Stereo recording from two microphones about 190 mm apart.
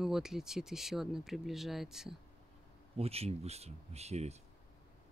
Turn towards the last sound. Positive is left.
turn(degrees=-35)  # may be behind; listen again after turning